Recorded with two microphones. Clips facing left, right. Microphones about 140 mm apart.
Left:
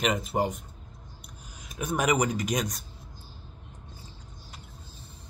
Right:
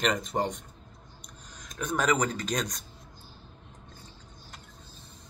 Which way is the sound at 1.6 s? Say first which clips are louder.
Left 1 dB; 10° left (ahead or behind).